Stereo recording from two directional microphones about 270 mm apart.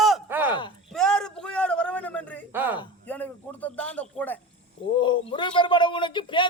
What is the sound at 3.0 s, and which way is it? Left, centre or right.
A man's voice, centre.